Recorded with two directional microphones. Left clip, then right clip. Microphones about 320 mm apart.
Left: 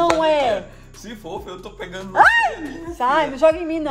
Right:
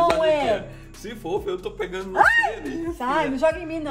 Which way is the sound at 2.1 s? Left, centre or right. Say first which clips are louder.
Left 4 dB; left.